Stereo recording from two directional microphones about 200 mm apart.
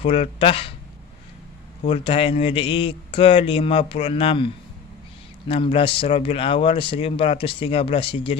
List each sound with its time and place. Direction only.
0.0 s speech: 30° left (ahead or behind)
1.8 s speech: 30° left (ahead or behind)
5.5 s speech: 30° left (ahead or behind)